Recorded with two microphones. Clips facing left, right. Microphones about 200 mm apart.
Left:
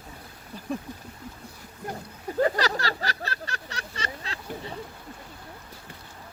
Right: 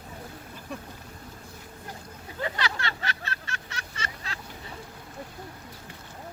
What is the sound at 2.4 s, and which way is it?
Vehicle, 40° left (ahead or behind).